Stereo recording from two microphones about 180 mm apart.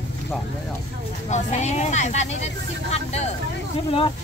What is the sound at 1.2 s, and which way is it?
Speech, 40° left (ahead or behind).